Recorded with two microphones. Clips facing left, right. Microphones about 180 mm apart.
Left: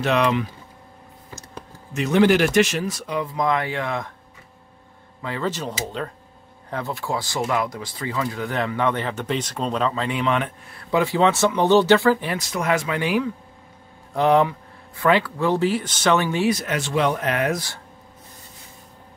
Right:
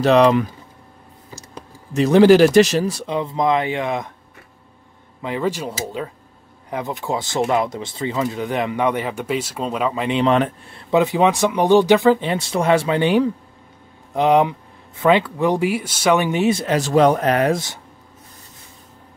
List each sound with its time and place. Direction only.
0.0 s speech: 35° right (ahead or behind)
2.0 s speech: 35° right (ahead or behind); by 4.1 s 20° right (ahead or behind)
5.2 s speech: 15° right (ahead or behind)
10.2 s speech: 35° right (ahead or behind)
10.8 s speech: 20° right (ahead or behind)
14.1 s speech: 15° right (ahead or behind); by 17.6 s 35° right (ahead or behind)